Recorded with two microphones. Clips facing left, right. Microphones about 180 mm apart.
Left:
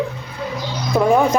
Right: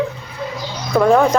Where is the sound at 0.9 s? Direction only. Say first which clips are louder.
Right 2 dB; 10° left (ahead or behind).